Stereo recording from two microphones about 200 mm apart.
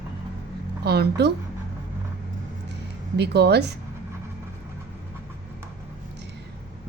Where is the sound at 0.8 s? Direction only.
55° right (ahead or behind).